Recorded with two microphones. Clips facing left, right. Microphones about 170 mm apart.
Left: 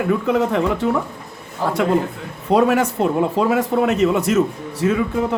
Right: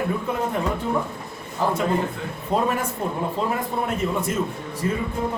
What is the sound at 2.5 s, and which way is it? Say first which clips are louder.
Speech: left 8 dB; 75° left (ahead or behind).